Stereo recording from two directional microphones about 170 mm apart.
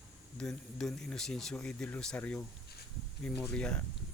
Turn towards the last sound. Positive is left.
turn(degrees=5)  # may be behind; listen again after turning